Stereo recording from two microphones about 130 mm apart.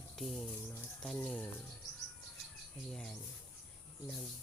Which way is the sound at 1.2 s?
10° left (ahead or behind).